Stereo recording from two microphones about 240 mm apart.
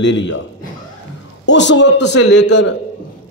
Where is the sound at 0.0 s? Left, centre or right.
Left.